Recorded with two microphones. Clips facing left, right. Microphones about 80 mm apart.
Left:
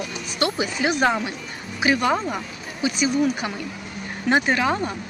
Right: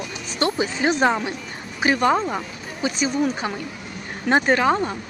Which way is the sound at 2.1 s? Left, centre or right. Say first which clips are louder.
Right 2 dB; right.